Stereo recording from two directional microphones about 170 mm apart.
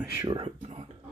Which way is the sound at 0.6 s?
35° right (ahead or behind).